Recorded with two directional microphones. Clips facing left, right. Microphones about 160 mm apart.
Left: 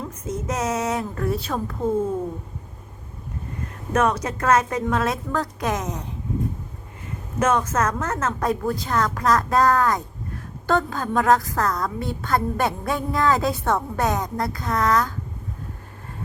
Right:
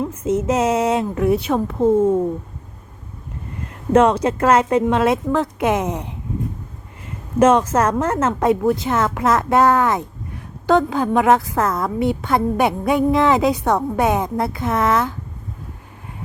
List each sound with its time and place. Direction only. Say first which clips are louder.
0.4 s a woman's voice: right 5 dB; 30° right (ahead or behind)
1.1 s a woman's voice: right 8 dB; 15° right (ahead or behind)
3.9 s a woman's voice: right 7 dB; 30° right (ahead or behind)
7.3 s a woman's voice: right 7 dB; 30° right (ahead or behind)